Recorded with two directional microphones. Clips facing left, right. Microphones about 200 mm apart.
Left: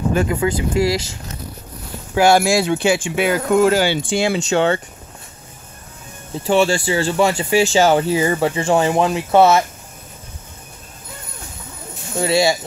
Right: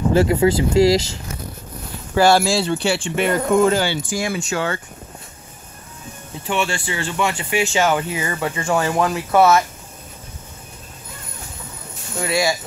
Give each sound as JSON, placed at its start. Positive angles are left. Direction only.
{"t": 0.1, "sound": "speech", "side_deg": -30}
{"t": 2.1, "sound": "speech", "side_deg": 15}
{"t": 4.1, "sound": "speech", "side_deg": 25}
{"t": 6.4, "sound": "speech", "side_deg": 35}
{"t": 12.2, "sound": "speech", "side_deg": 30}